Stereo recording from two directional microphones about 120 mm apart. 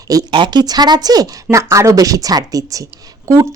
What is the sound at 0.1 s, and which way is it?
Speech, 35° right (ahead or behind).